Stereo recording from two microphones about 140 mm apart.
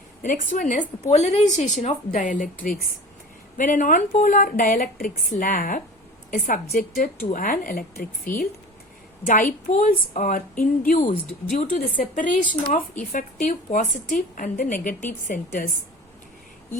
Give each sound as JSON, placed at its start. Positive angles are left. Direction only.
{"t": 0.2, "sound": "a woman's voice", "side_deg": 65}
{"t": 3.6, "sound": "a woman's voice", "side_deg": 65}
{"t": 9.2, "sound": "speech", "side_deg": 70}